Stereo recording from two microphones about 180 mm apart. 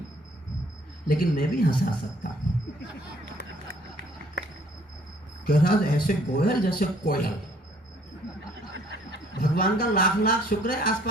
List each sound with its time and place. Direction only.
1.0 s speech: 55° left (ahead or behind)
5.5 s speech: 55° left (ahead or behind)
8.7 s snicker: 85° right
9.4 s speech: 55° left (ahead or behind)